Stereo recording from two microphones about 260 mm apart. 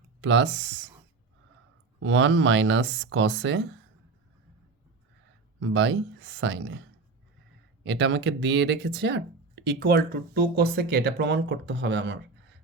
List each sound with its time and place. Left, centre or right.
0.2 s speech: right
2.0 s speech: right
5.5 s speech: right
7.9 s speech: right